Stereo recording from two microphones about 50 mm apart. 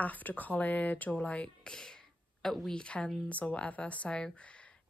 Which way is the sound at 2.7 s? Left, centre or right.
Centre.